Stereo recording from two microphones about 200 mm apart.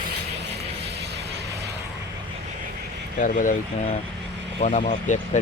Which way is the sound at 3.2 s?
40° left (ahead or behind).